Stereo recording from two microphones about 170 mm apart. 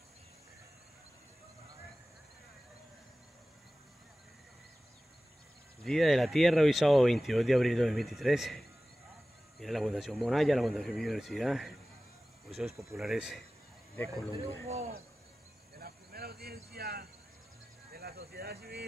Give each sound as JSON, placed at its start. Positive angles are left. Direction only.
{"t": 5.9, "sound": "speech", "side_deg": 0}
{"t": 13.9, "sound": "speech", "side_deg": 10}
{"t": 15.8, "sound": "cricket", "side_deg": -65}
{"t": 17.9, "sound": "speech", "side_deg": -65}